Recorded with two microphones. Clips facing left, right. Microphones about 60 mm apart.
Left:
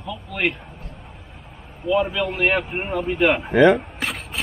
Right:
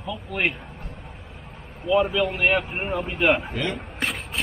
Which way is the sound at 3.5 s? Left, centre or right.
Left.